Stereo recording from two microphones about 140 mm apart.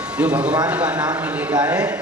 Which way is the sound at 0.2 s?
10° right (ahead or behind).